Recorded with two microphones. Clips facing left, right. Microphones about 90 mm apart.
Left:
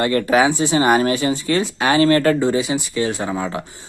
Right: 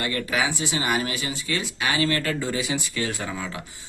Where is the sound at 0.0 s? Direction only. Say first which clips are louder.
Left 10 dB; 35° left (ahead or behind).